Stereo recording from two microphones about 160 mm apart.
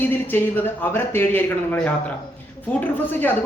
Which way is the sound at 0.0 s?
10° left (ahead or behind).